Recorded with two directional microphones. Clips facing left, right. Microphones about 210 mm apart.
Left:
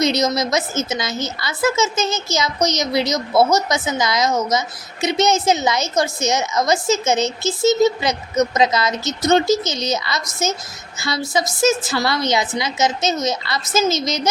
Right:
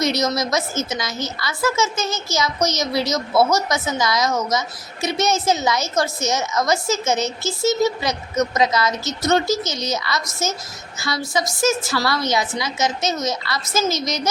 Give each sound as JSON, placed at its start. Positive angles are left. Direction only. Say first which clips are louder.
{"t": 0.0, "sound": "a woman's voice", "louder": "left 2 dB", "side_deg": 20}